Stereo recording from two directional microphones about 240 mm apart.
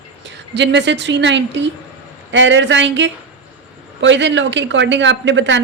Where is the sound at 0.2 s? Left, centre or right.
Right.